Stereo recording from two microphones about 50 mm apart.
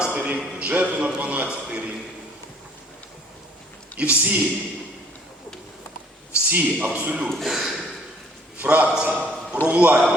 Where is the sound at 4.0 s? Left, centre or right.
Right.